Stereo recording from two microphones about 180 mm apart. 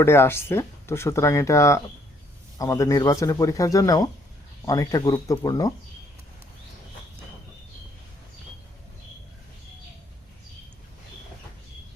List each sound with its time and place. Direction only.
0.0 s speech: 15° left (ahead or behind)